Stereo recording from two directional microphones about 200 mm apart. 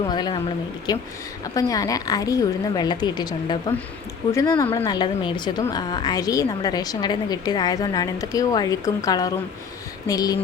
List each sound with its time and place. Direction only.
0.1 s a woman's voice: 20° left (ahead or behind)